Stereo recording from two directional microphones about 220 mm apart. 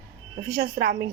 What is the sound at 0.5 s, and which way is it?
Speech, 50° right (ahead or behind).